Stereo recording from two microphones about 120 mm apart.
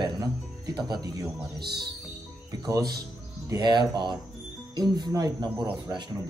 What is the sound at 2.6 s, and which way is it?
Speech, 30° right (ahead or behind).